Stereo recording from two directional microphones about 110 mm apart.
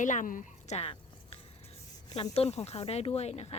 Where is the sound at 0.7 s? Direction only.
75° left (ahead or behind).